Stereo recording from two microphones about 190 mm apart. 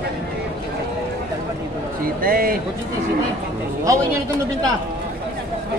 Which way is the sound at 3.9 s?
15° right (ahead or behind).